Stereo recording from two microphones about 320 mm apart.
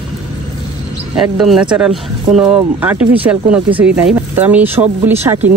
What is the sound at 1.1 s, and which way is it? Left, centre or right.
Speech, centre.